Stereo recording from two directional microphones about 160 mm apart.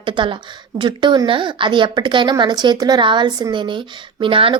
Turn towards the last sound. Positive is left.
turn(degrees=-35)  # may be behind; listen again after turning